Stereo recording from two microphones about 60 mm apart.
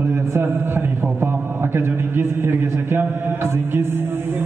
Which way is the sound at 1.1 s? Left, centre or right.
Right.